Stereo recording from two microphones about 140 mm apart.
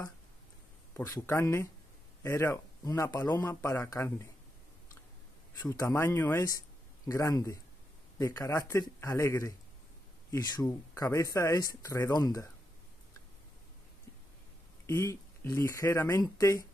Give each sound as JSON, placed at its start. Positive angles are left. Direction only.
{"t": 1.0, "sound": "speech", "side_deg": 20}
{"t": 5.6, "sound": "speech", "side_deg": 25}
{"t": 14.9, "sound": "speech", "side_deg": 20}